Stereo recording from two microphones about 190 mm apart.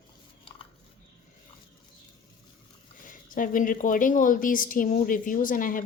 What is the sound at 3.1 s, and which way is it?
A woman's voice, 45° left (ahead or behind).